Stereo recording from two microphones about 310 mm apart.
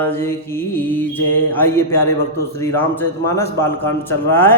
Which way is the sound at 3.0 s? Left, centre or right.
Centre.